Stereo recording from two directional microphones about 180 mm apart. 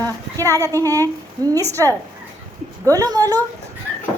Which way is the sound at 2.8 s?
20° right (ahead or behind).